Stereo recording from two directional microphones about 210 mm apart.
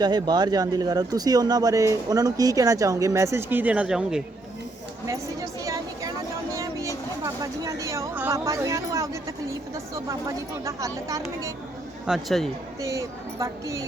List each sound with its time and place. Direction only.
0.0 s speech: 20° right (ahead or behind); by 4.2 s 5° right (ahead or behind)
5.0 s a sound: 15° right (ahead or behind)
7.4 s speech: 15° right (ahead or behind)
12.0 s speech: centre (ahead or behind)
12.8 s speech: 15° right (ahead or behind)